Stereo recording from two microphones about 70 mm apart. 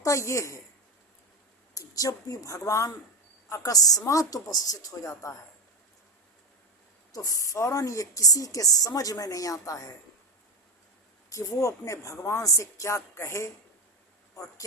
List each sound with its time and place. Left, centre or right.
0.0 s a woman's voice: left
1.7 s a woman's voice: left
7.1 s a woman's voice: left
11.3 s a woman's voice: left